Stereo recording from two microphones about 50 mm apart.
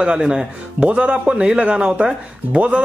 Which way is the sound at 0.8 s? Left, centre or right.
Right.